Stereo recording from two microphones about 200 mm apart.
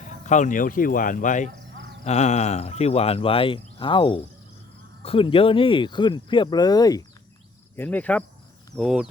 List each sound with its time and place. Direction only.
0.3 s speech: 40° left (ahead or behind); by 7.0 s 20° left (ahead or behind)
7.8 s speech: 10° left (ahead or behind)